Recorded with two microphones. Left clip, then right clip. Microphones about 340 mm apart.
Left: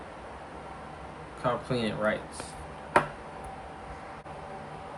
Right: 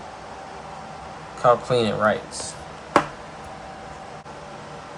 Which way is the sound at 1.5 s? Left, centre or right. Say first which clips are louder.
Right 12 dB; centre.